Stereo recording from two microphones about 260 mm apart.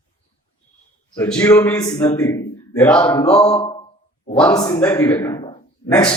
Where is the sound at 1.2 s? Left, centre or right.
Centre.